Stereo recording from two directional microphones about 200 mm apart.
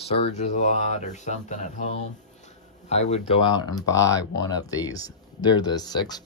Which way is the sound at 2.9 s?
35° left (ahead or behind).